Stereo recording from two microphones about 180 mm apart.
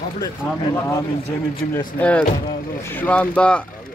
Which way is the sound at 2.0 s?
5° left (ahead or behind).